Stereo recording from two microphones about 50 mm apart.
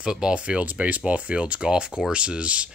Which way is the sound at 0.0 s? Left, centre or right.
Centre.